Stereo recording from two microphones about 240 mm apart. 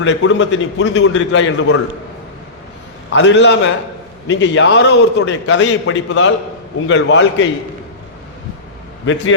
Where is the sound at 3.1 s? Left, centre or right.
Left.